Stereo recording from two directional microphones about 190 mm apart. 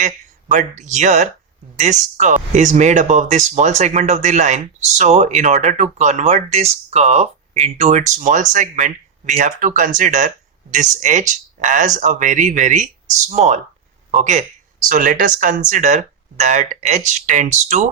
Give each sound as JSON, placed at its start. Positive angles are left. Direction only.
{"t": 0.0, "sound": "a woman's voice", "side_deg": -40}